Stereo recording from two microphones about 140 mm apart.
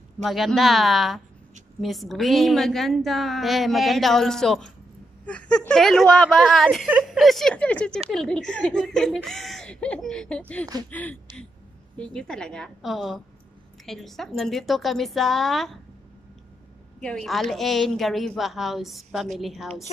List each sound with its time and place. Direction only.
0.2 s a woman's voice: centre (ahead or behind)
10.9 s a sound: 10° left (ahead or behind)
12.0 s a woman's voice: 5° left (ahead or behind)
17.0 s a woman's voice: 5° left (ahead or behind)